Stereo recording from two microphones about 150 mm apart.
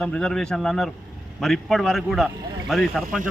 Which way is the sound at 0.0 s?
5° left (ahead or behind).